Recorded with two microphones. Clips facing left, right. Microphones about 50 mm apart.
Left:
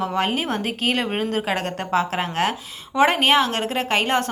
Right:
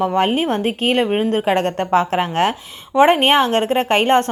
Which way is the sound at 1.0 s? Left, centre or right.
Centre.